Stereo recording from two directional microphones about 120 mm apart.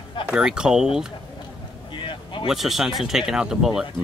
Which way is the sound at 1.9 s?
45° left (ahead or behind).